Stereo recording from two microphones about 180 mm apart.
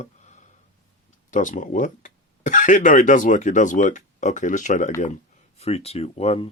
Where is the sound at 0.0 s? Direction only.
40° left (ahead or behind).